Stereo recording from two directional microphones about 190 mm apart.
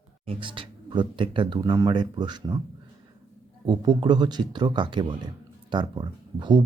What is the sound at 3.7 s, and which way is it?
Speech, 20° right (ahead or behind).